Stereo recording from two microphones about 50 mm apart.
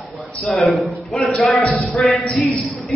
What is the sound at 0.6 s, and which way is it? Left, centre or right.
Speech, centre.